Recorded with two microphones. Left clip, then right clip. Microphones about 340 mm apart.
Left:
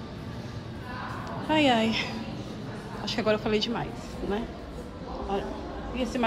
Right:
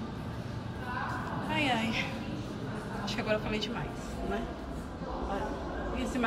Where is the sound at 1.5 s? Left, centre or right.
Centre.